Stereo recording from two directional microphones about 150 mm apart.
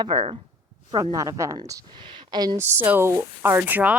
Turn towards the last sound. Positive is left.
turn(degrees=-10)  # may be behind; listen again after turning